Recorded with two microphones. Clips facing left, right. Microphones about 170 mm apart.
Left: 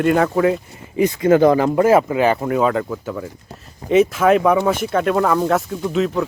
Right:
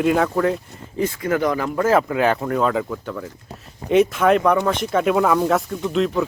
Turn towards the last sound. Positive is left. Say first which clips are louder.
# left 1 dB
turn(degrees=0)  # may be behind; listen again after turning